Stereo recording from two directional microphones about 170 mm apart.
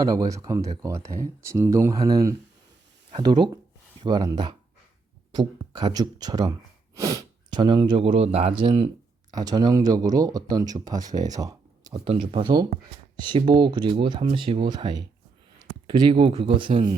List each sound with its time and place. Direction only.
0.1 s speech: 20° right (ahead or behind)